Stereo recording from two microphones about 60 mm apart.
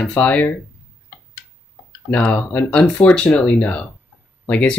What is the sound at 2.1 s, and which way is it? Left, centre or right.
Speech, centre.